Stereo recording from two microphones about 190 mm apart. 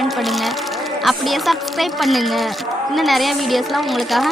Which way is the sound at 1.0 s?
Centre (ahead or behind).